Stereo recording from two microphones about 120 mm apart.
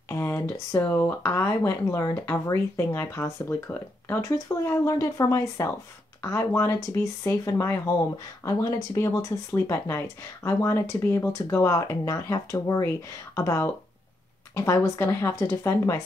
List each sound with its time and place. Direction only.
0.1 s speech: 20° left (ahead or behind)